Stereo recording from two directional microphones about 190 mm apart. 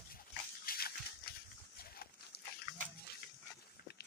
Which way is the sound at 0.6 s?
50° left (ahead or behind).